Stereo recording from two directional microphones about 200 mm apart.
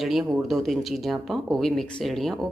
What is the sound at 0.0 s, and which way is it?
Speech, centre (ahead or behind).